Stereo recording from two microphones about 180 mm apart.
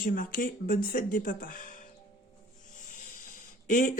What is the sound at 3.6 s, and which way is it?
Speech, 45° left (ahead or behind).